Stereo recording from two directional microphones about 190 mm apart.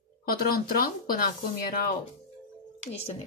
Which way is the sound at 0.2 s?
55° left (ahead or behind).